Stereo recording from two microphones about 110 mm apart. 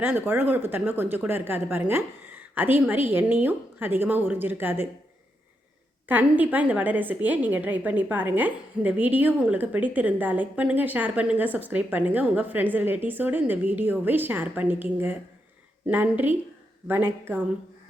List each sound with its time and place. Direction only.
0.0 s a woman's voice: 15° right (ahead or behind)
6.1 s a woman's voice: 15° right (ahead or behind)